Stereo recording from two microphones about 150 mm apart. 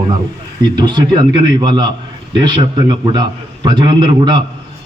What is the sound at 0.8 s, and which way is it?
A man's voice, 30° right (ahead or behind).